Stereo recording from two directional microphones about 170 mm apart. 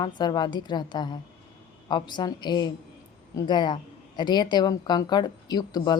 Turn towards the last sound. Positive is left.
turn(degrees=25)  # may be behind; listen again after turning